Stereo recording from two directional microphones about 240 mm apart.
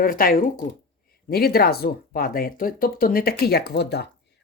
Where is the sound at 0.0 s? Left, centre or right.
Left.